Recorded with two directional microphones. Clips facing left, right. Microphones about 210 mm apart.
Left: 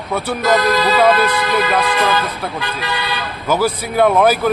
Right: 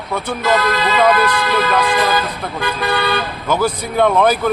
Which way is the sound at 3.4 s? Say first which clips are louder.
Left 2 dB; 5° left (ahead or behind).